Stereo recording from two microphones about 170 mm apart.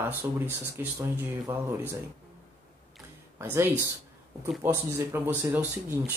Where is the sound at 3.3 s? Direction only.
15° right (ahead or behind).